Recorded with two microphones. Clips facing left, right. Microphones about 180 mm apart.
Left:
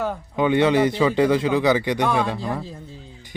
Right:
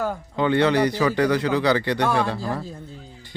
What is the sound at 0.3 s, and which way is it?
Speech, 15° left (ahead or behind).